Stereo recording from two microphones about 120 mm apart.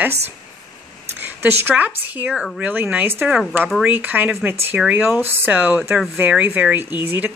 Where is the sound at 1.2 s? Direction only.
15° right (ahead or behind).